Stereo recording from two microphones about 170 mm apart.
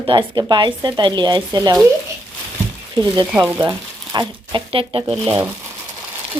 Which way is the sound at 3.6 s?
25° right (ahead or behind).